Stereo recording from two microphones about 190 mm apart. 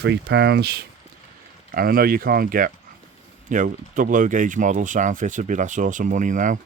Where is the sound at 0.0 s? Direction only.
65° right (ahead or behind).